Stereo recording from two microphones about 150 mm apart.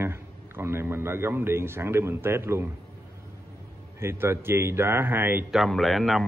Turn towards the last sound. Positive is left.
turn(degrees=0)  # may be behind; listen again after turning